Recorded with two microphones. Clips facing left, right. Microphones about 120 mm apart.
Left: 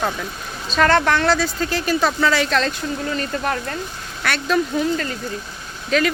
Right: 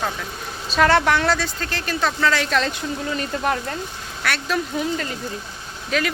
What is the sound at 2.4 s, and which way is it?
Speech, 10° right (ahead or behind).